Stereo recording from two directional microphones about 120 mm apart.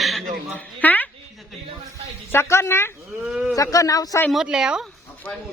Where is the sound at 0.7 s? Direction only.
15° left (ahead or behind).